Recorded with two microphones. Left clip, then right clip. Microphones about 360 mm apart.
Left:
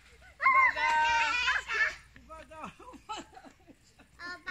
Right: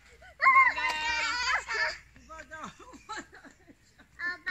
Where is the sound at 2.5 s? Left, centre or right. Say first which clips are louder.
Right 1 dB; centre.